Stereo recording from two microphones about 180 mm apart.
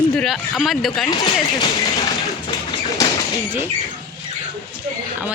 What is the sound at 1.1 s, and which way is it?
Speech, 25° left (ahead or behind).